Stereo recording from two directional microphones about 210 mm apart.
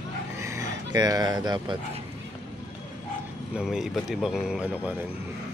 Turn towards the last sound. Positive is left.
turn(degrees=-5)  # may be behind; listen again after turning